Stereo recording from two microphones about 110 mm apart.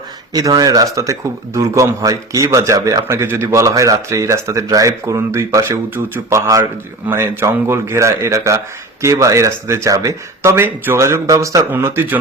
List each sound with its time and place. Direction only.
0.3 s a man's voice: 35° right (ahead or behind); by 12.2 s 20° right (ahead or behind)